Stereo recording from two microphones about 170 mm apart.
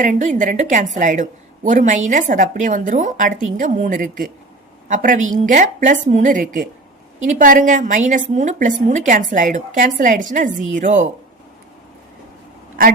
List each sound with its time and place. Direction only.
0.0 s a woman's voice: 45° right (ahead or behind)